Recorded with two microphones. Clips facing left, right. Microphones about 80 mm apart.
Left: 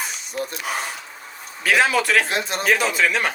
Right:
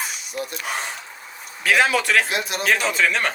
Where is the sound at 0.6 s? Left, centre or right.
Centre.